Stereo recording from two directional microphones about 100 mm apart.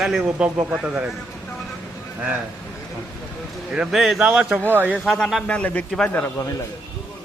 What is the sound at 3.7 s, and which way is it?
Speech, 5° right (ahead or behind).